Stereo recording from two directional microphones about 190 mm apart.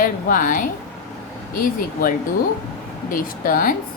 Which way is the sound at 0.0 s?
45° left (ahead or behind).